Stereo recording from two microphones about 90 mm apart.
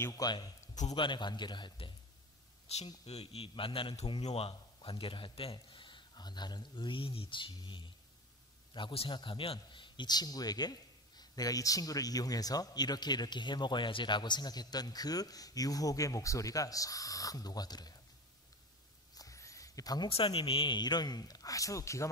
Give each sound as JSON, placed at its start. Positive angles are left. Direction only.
{"t": 0.1, "sound": "a man's voice", "side_deg": 45}
{"t": 0.9, "sound": "a man's voice", "side_deg": 60}
{"t": 3.3, "sound": "a man's voice", "side_deg": 80}
{"t": 4.1, "sound": "a man's voice", "side_deg": 85}
{"t": 8.7, "sound": "a man's voice", "side_deg": 80}
{"t": 19.1, "sound": "a sound", "side_deg": 40}
{"t": 20.1, "sound": "a man's voice", "side_deg": 90}